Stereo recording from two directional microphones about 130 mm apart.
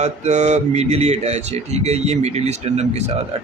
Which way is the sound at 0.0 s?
65° right (ahead or behind).